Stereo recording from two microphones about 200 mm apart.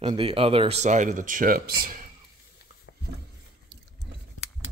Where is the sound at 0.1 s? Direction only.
30° right (ahead or behind); by 2.0 s 45° right (ahead or behind).